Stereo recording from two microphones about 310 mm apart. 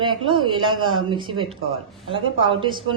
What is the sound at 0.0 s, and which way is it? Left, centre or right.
Speech, centre.